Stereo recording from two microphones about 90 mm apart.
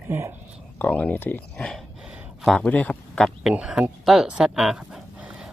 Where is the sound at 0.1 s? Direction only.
25° right (ahead or behind).